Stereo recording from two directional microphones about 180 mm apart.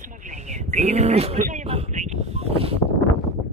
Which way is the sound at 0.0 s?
40° right (ahead or behind).